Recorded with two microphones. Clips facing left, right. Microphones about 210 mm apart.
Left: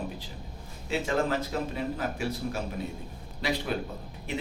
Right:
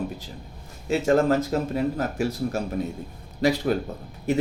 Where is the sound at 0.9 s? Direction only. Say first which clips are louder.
Right 8 dB; 45° right (ahead or behind).